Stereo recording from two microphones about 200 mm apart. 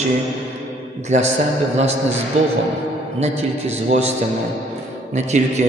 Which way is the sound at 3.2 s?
35° right (ahead or behind).